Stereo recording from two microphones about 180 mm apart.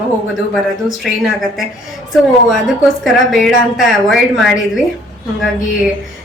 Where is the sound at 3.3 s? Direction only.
Centre (ahead or behind).